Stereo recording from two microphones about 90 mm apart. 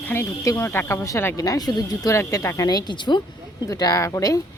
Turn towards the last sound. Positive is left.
turn(degrees=40)  # may be behind; listen again after turning